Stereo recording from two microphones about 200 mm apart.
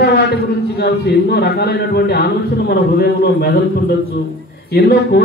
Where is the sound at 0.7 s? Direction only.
55° left (ahead or behind).